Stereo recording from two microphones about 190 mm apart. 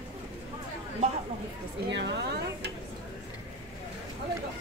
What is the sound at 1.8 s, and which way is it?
Speech, 65° right (ahead or behind).